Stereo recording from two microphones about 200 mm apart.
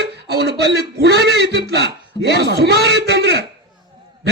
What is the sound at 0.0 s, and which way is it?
A man's voice, 55° right (ahead or behind).